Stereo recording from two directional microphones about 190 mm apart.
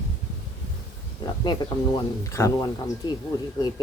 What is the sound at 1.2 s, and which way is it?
Speech, 20° left (ahead or behind).